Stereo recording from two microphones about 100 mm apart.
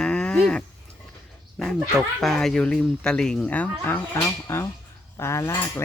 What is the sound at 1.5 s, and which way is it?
Speech, 5° left (ahead or behind).